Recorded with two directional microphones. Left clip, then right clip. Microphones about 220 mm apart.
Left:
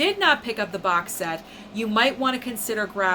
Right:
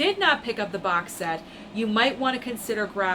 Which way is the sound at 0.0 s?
20° left (ahead or behind).